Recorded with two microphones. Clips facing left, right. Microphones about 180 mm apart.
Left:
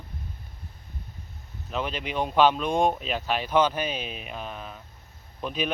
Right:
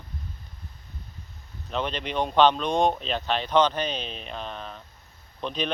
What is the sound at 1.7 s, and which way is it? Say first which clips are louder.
Speech: right 1 dB; 5° left (ahead or behind).